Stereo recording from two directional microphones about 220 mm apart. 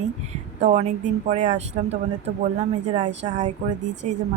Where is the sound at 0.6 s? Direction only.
30° right (ahead or behind).